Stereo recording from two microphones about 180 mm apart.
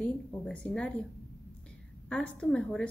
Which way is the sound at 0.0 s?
5° left (ahead or behind).